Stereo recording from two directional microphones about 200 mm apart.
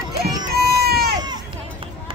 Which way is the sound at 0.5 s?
50° right (ahead or behind).